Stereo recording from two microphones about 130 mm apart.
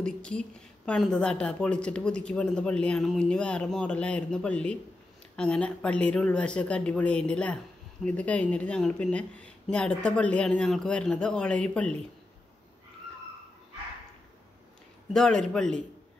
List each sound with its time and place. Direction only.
0.0 s a woman's voice: 5° left (ahead or behind)
15.1 s a man's voice: 5° left (ahead or behind)